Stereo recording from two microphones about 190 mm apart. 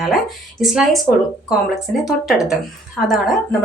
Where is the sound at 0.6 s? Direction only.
Centre (ahead or behind).